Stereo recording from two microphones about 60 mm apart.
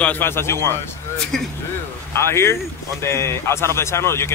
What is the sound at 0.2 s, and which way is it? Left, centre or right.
Speech, left.